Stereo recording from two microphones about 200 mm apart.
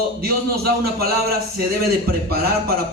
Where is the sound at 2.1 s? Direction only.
50° right (ahead or behind).